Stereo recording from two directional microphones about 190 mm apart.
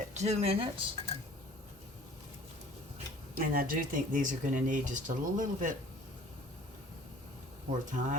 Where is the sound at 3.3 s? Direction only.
50° right (ahead or behind).